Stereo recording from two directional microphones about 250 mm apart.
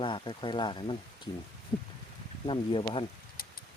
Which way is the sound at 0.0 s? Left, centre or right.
Centre.